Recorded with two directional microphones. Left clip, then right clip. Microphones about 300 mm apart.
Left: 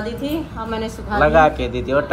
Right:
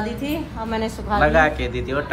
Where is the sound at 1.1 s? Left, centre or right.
Centre.